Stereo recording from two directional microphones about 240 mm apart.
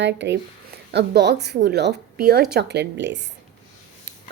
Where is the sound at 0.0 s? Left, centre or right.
Right.